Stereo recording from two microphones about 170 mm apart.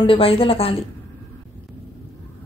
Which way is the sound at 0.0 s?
35° left (ahead or behind).